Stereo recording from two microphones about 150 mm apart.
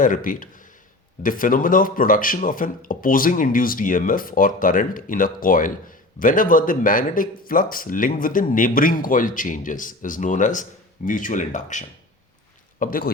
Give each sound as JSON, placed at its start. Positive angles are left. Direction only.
{"t": 0.0, "sound": "speech", "side_deg": 65}
{"t": 12.8, "sound": "speech", "side_deg": 70}